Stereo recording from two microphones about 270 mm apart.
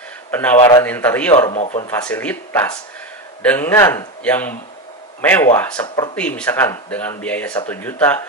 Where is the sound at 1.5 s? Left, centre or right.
Left.